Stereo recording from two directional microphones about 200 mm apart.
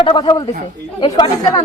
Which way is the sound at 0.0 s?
25° left (ahead or behind).